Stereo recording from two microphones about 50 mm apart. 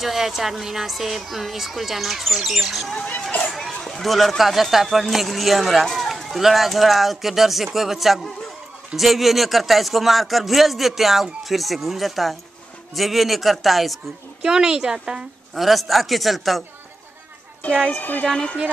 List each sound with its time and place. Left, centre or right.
0.0 s speech: centre
3.2 s a sound: left
3.5 s a sound: centre
4.4 s speech: centre
14.4 s speech: centre
15.5 s speech: centre
17.9 s speech: left
18.2 s speech: centre